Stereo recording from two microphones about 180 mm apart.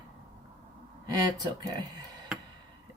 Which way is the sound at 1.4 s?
20° right (ahead or behind).